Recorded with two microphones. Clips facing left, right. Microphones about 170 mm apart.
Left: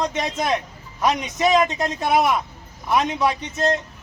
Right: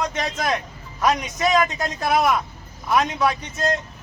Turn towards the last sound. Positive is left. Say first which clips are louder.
# left 1 dB
turn(degrees=25)  # may be behind; listen again after turning